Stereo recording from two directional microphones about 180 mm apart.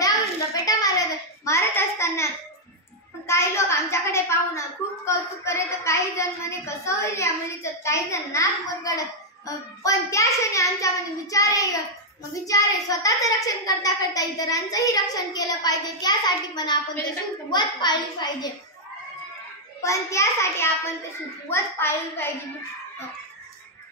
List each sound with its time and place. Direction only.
0.7 s a sound: 20° left (ahead or behind)
3.3 s a woman's voice: 15° left (ahead or behind)
19.8 s a child's voice: 15° left (ahead or behind)